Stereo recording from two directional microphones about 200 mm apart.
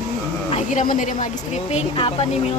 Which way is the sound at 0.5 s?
40° left (ahead or behind).